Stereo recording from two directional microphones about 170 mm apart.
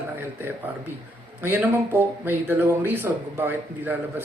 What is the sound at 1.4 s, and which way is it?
Speech, 15° right (ahead or behind).